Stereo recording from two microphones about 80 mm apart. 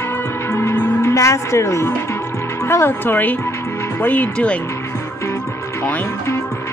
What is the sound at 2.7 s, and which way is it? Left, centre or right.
Speech, left.